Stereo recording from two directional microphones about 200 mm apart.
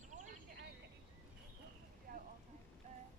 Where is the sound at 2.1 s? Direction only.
45° right (ahead or behind).